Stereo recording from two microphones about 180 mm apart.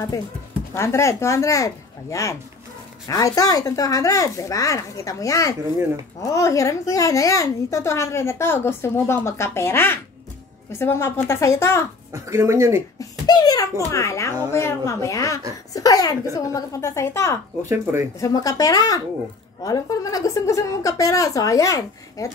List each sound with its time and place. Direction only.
0.7 s a child's voice: 15° left (ahead or behind)
12.1 s speech: 15° right (ahead or behind)
13.0 s a child's voice: 20° left (ahead or behind)